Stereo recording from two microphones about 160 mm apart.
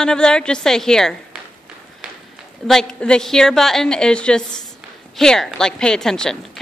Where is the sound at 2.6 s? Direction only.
5° left (ahead or behind).